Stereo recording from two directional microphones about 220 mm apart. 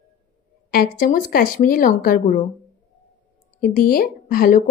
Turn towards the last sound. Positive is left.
turn(degrees=40)  # may be behind; listen again after turning